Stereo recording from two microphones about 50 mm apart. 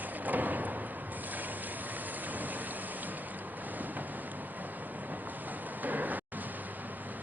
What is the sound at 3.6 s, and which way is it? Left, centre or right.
Vehicle, right.